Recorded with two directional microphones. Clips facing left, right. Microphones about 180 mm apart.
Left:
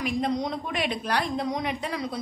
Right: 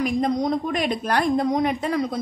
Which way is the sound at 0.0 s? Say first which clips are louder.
Right 5 dB; 45° right (ahead or behind).